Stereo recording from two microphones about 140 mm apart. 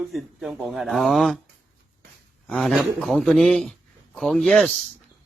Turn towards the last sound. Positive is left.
turn(degrees=0)  # may be behind; listen again after turning